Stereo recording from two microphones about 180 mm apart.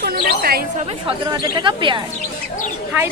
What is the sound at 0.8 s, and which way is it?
A woman's voice, 25° right (ahead or behind).